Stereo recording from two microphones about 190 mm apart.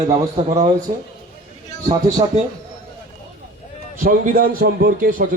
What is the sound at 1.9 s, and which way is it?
Speech, 20° right (ahead or behind).